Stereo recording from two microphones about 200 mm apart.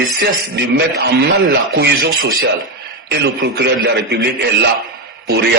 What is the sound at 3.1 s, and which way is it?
A man's voice, 60° right (ahead or behind).